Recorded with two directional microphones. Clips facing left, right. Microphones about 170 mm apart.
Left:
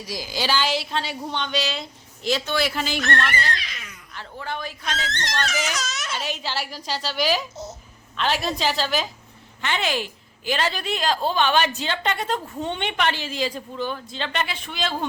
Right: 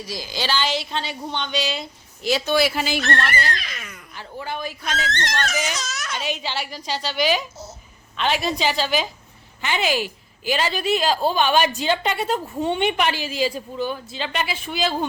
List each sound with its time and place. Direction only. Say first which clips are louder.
0.1 s a woman's voice: left 1 dB; 10° left (ahead or behind); by 3.0 s 5° right (ahead or behind)
3.0 s speech: right 1 dB; 35° right (ahead or behind)
3.5 s cat: right 1 dB; 50° right (ahead or behind)
4.1 s a woman's voice: right 1 dB; 10° right (ahead or behind)
5.0 s speech: right 2 dB; 55° right (ahead or behind)
6.1 s a woman's voice: right 5 dB; 5° left (ahead or behind)